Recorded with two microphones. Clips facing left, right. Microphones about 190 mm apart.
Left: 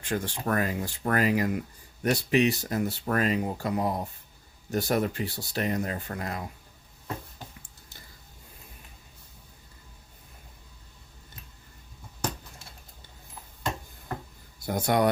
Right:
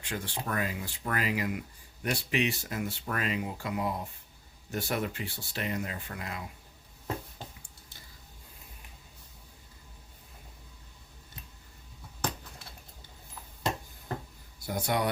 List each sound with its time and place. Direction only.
0.0 s speech: 45° left (ahead or behind)
14.7 s speech: 50° left (ahead or behind)